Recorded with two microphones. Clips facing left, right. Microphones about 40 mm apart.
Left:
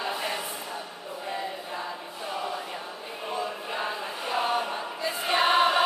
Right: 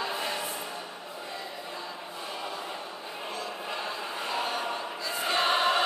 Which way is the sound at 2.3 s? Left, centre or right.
Centre.